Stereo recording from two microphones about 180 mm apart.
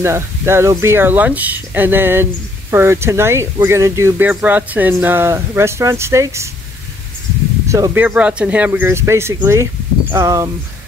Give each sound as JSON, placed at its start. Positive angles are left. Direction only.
{"t": 0.0, "sound": "speech", "side_deg": -15}
{"t": 7.6, "sound": "speech", "side_deg": -15}